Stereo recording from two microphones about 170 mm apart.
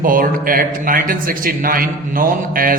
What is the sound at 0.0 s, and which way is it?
A man's voice, 55° right (ahead or behind).